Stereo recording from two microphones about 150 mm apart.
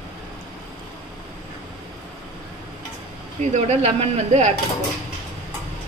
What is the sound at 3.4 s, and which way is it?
Speech, 50° right (ahead or behind).